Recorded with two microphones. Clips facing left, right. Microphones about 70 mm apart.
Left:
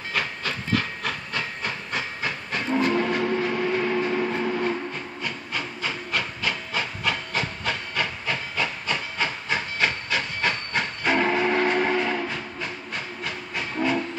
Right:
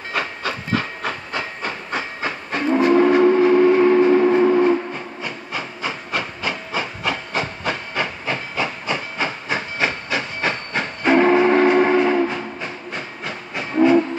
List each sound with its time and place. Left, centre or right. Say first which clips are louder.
0.1 s hiss: right 4 dB; centre
2.0 s train: right 4 dB; centre
5.2 s hiss: right 1 dB; centre
12.9 s train: right 3 dB; centre